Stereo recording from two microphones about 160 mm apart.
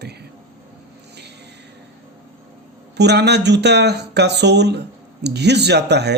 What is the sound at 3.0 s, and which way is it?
Speech, 90° right.